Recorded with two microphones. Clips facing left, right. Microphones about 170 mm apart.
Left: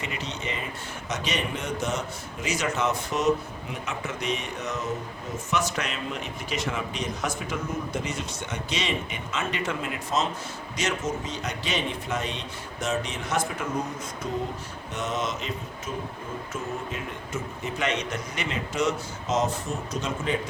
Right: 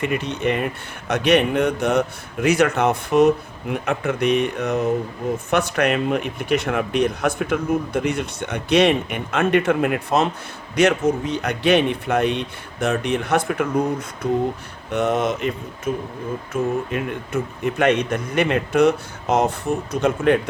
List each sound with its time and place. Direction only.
0.0 s a man's voice: 55° right (ahead or behind)